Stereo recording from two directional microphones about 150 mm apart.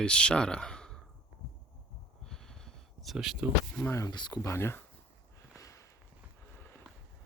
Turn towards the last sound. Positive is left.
turn(degrees=20)  # may be behind; listen again after turning